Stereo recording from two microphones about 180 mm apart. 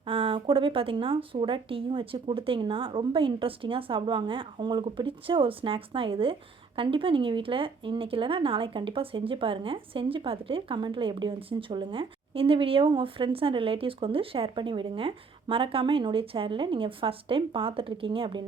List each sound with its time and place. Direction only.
0.0 s speech: 30° right (ahead or behind)